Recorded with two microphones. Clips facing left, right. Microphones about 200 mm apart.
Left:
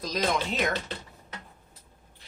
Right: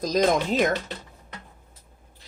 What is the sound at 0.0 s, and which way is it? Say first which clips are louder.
Speech: right 7 dB; 45° right (ahead or behind).